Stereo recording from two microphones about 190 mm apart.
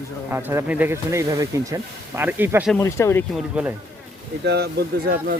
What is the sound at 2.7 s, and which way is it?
Speech, 15° left (ahead or behind).